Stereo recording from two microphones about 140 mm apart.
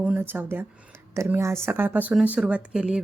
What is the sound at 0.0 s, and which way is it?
Speech, 10° right (ahead or behind).